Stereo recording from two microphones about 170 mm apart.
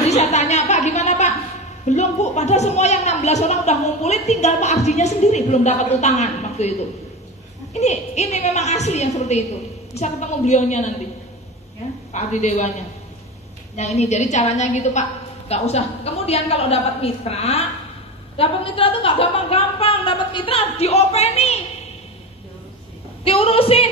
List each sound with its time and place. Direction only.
0.1 s a sound: 40° left (ahead or behind)
1.9 s a woman's voice: 40° left (ahead or behind)
7.7 s a woman's voice: 40° left (ahead or behind)
12.1 s a woman's voice: 45° left (ahead or behind)
13.7 s a woman's voice: 40° left (ahead or behind)
23.2 s a woman's voice: 35° left (ahead or behind)